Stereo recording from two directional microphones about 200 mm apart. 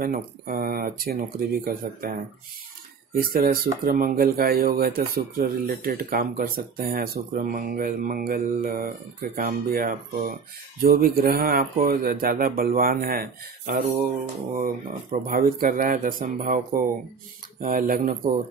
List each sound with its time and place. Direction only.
0.0 s speech: 45° right (ahead or behind)
3.2 s speech: 45° right (ahead or behind)